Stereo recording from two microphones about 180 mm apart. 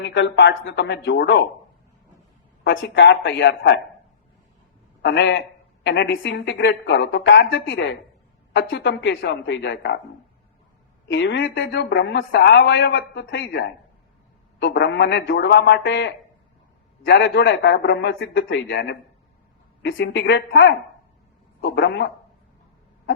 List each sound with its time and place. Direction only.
0.0 s speech: 85° left
2.6 s speech: 75° left (ahead or behind)
5.0 s speech: 70° left (ahead or behind)
11.1 s speech: 85° left
19.8 s speech: 90° left
21.6 s speech: 75° left (ahead or behind)